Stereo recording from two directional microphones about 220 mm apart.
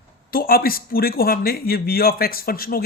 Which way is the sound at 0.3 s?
40° left (ahead or behind).